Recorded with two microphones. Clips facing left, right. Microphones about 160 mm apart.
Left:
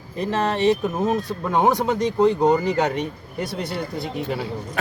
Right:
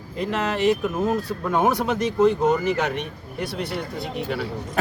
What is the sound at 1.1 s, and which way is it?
Speech, 20° left (ahead or behind).